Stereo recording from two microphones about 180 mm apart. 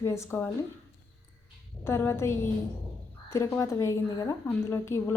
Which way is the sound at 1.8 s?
15° left (ahead or behind).